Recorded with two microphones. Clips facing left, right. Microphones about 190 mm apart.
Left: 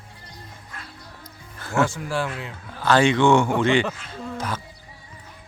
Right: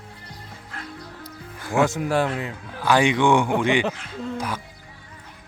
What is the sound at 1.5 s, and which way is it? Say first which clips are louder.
Music: right 2 dB; 15° right (ahead or behind).